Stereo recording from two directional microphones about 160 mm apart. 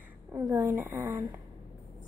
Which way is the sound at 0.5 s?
10° right (ahead or behind).